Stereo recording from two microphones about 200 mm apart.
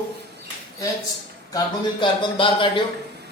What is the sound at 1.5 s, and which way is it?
A man's voice, 25° left (ahead or behind).